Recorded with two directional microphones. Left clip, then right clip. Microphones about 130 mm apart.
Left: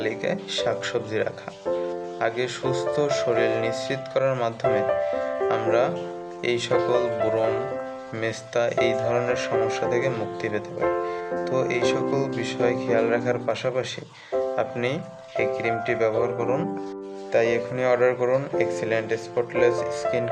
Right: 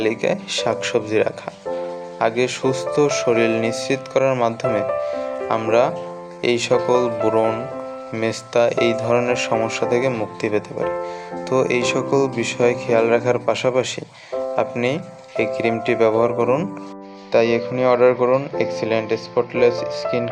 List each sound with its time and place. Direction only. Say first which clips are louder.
0.0 s speech: right 6 dB; 35° right (ahead or behind)
6.4 s speech: right 5 dB; 30° right (ahead or behind)